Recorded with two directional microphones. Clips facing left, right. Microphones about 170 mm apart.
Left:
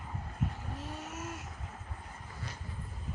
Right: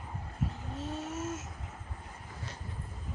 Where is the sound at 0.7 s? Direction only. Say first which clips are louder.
Right 5 dB; 25° right (ahead or behind).